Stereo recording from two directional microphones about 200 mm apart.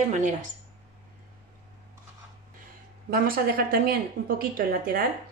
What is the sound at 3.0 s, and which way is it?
A woman's voice, 45° right (ahead or behind).